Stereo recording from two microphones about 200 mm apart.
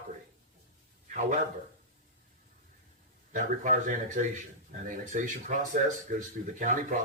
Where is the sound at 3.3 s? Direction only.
40° right (ahead or behind).